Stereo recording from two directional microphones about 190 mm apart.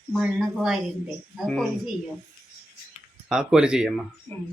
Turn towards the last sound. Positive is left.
turn(degrees=-30)  # may be behind; listen again after turning